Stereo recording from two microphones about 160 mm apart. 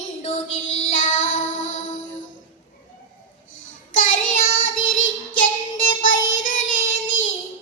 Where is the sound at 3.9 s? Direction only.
55° left (ahead or behind).